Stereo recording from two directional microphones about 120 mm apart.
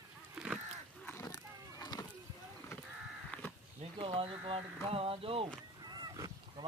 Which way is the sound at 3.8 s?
50° right (ahead or behind).